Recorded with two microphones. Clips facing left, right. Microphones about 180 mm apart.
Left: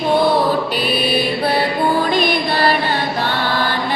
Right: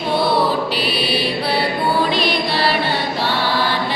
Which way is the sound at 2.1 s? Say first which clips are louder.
Left 2 dB; 50° left (ahead or behind).